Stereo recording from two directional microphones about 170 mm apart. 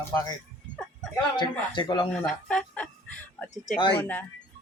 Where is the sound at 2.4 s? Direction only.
5° left (ahead or behind).